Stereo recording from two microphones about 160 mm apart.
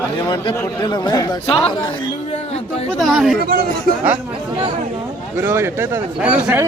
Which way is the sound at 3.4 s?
70° right (ahead or behind).